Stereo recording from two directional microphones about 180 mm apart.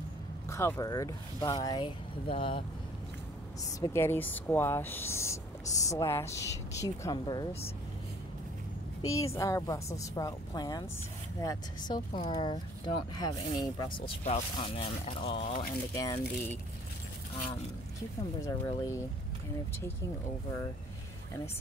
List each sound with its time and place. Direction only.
0.5 s speech: 15° left (ahead or behind)
3.8 s speech: 15° left (ahead or behind)
9.0 s speech: 15° left (ahead or behind)
13.9 s speech: 35° left (ahead or behind)
15.9 s speech: 20° left (ahead or behind)
18.4 s speech: 15° left (ahead or behind)